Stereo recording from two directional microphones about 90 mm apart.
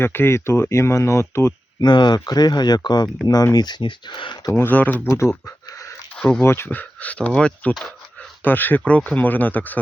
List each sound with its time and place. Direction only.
0.0 s speech: 25° left (ahead or behind)
1.8 s speech: 55° left (ahead or behind)
4.5 s speech: 20° left (ahead or behind)
6.1 s speech: 10° left (ahead or behind)
6.4 s speech: 25° left (ahead or behind); by 7.9 s 5° left (ahead or behind)
8.4 s speech: 20° left (ahead or behind)